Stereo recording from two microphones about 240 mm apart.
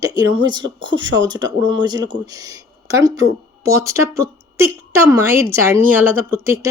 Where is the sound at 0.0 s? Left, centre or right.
Centre.